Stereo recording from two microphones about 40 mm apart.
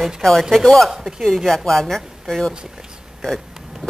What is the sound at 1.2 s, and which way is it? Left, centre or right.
Speech, centre.